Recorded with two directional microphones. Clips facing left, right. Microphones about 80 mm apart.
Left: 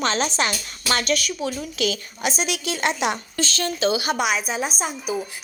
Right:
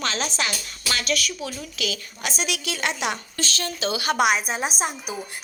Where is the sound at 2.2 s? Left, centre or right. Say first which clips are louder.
Left 3 dB; left.